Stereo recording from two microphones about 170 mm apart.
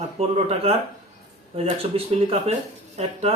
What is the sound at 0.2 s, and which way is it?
Speech, 35° right (ahead or behind).